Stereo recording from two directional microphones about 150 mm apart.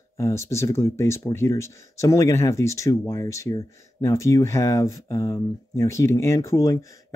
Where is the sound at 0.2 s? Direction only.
20° left (ahead or behind).